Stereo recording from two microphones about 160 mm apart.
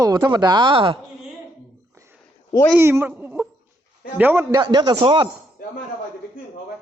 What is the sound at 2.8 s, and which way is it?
Speech, 15° right (ahead or behind).